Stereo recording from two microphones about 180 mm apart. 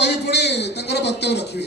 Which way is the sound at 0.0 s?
65° left (ahead or behind).